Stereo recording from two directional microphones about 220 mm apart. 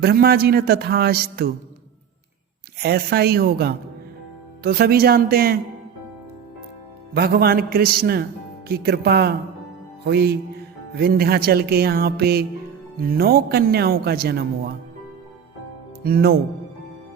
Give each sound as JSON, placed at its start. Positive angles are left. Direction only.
{"t": 0.0, "sound": "speech", "side_deg": -45}
{"t": 2.7, "sound": "speech", "side_deg": -45}
{"t": 7.1, "sound": "speech", "side_deg": -45}
{"t": 16.0, "sound": "speech", "side_deg": -45}